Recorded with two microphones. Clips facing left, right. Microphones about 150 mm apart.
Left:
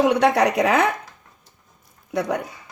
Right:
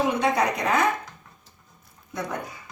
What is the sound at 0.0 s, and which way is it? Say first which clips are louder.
Speech: left 6 dB; 75° left (ahead or behind).